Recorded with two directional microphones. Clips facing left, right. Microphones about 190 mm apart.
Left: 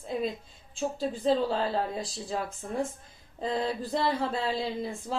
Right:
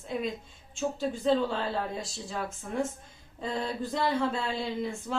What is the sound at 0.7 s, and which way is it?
A woman's voice, 35° left (ahead or behind).